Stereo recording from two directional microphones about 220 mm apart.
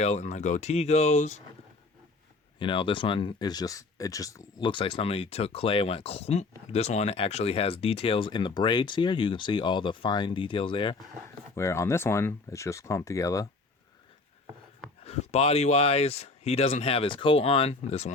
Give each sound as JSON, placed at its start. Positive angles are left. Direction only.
{"t": 0.0, "sound": "speech", "side_deg": 30}
{"t": 2.6, "sound": "speech", "side_deg": 20}
{"t": 11.5, "sound": "speech", "side_deg": 10}
{"t": 15.0, "sound": "speech", "side_deg": 30}